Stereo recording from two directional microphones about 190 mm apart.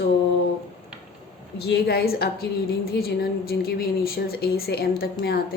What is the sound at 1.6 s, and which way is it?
A woman's voice, 55° left (ahead or behind).